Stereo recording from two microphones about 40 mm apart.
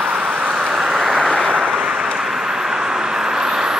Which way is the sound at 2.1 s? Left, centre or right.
Centre.